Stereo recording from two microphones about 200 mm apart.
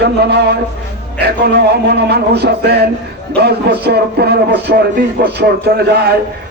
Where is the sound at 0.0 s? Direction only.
55° right (ahead or behind).